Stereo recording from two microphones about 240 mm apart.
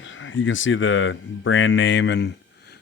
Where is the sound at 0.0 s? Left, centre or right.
Left.